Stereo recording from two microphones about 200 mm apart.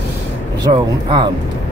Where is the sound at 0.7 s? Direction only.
35° right (ahead or behind).